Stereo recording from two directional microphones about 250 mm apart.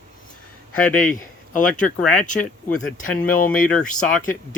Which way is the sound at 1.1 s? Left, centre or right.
Left.